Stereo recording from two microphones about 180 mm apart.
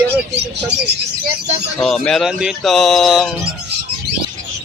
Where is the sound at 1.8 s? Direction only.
5° left (ahead or behind).